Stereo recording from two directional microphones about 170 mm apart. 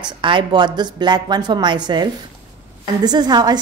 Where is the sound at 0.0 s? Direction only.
30° right (ahead or behind).